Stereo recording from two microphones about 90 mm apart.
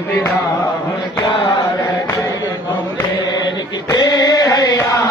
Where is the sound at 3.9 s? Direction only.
50° left (ahead or behind).